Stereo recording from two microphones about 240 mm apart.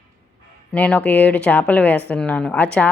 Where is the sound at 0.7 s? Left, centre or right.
Centre.